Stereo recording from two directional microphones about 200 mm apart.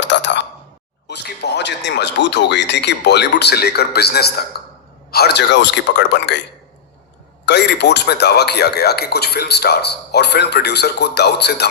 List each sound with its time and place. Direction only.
0.0 s plop: 65° left (ahead or behind)
1.0 s a man's voice: 55° left (ahead or behind)
7.4 s a man's voice: 60° left (ahead or behind)